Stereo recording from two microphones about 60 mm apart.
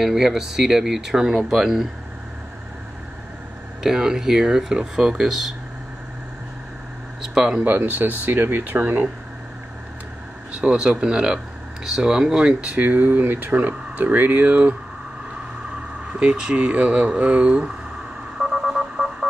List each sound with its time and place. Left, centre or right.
0.0 s speech: centre
3.8 s speech: centre
7.2 s speech: centre
7.6 s speech: right
10.6 s speech: centre
16.1 s speech: centre
18.4 s telephone dialing: centre